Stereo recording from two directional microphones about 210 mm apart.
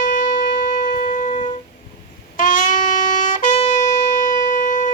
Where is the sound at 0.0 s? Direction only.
40° left (ahead or behind).